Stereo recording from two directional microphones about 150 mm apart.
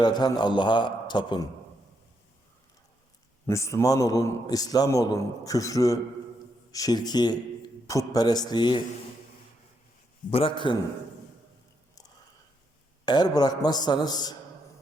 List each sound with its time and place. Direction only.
0.0 s a man's voice: 30° left (ahead or behind)
3.4 s a man's voice: 20° left (ahead or behind)
10.3 s a man's voice: 35° left (ahead or behind)
13.1 s a man's voice: 25° left (ahead or behind)